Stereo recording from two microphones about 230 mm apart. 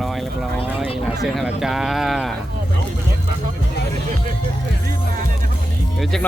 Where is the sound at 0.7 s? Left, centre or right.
Centre.